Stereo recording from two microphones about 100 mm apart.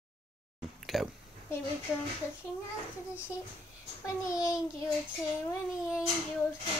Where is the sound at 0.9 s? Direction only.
5° right (ahead or behind).